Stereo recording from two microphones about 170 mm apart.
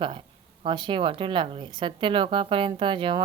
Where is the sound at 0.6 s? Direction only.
30° right (ahead or behind).